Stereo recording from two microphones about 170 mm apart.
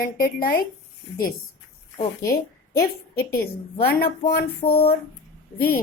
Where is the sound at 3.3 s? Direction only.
60° left (ahead or behind).